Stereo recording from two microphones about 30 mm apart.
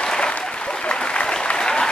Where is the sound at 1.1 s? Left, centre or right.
Left.